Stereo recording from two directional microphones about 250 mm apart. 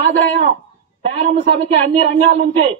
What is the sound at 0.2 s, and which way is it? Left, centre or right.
A woman's voice, right.